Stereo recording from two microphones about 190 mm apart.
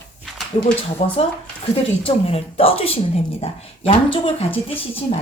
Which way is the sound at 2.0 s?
30° left (ahead or behind).